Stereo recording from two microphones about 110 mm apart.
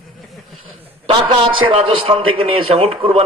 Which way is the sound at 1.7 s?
55° right (ahead or behind).